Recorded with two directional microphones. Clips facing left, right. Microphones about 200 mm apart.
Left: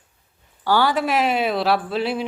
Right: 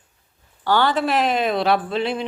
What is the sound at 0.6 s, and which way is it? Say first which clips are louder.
Speech: even; 10° left (ahead or behind).